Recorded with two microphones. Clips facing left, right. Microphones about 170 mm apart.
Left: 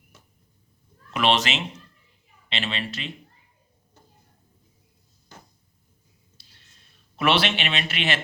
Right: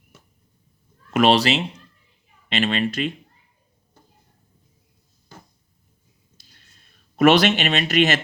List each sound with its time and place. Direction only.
1.1 s speech: 40° right (ahead or behind)
2.5 s speech: 50° right (ahead or behind)
6.4 s a sound: 45° right (ahead or behind)
7.2 s speech: 45° right (ahead or behind)